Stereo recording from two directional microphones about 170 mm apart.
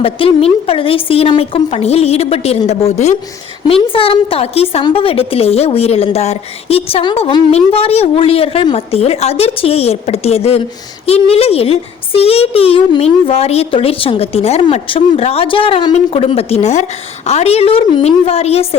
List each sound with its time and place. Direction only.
0.0 s a woman's voice: 35° left (ahead or behind)